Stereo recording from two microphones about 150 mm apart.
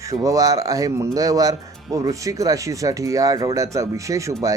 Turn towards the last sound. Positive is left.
turn(degrees=-20)  # may be behind; listen again after turning